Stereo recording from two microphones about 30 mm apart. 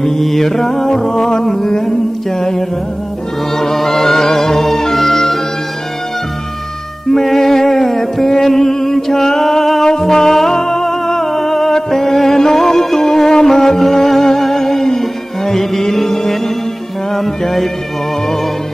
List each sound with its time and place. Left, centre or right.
0.0 s music: centre
3.5 s music: centre
7.1 s music: centre
17.4 s music: centre